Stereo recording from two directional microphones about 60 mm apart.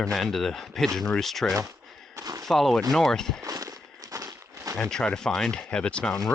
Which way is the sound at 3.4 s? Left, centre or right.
Right.